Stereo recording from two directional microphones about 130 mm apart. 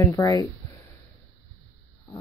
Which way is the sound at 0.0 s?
25° left (ahead or behind).